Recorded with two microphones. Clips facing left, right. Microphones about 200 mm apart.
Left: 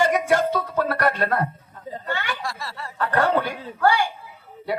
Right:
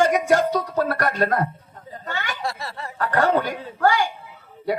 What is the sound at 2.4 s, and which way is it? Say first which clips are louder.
Snicker: right 3 dB; 20° right (ahead or behind).